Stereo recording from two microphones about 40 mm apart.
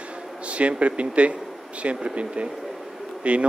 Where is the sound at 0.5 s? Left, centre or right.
Right.